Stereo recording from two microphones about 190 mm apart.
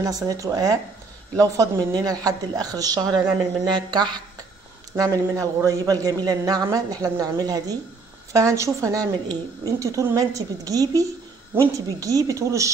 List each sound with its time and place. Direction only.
0.0 s a man's voice: 20° right (ahead or behind)